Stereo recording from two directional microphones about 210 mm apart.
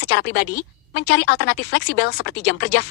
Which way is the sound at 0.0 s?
55° left (ahead or behind).